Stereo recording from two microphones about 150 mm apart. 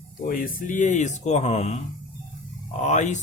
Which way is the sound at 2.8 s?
50° left (ahead or behind).